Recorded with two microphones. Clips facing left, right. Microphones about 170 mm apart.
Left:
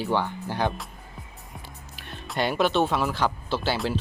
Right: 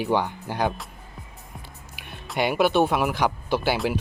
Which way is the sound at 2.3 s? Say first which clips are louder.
Right 3 dB; 10° right (ahead or behind).